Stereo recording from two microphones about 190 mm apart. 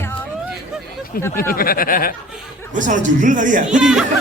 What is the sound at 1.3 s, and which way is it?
Speech, 50° left (ahead or behind).